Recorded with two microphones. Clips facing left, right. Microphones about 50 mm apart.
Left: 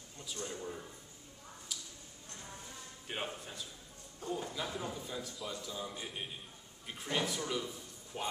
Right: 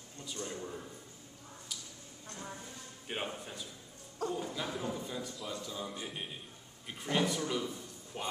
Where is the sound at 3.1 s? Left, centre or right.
Centre.